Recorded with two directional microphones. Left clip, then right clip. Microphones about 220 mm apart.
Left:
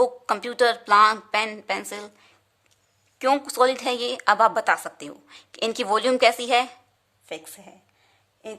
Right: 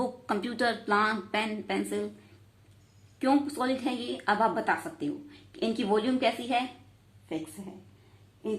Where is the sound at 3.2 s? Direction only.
40° left (ahead or behind).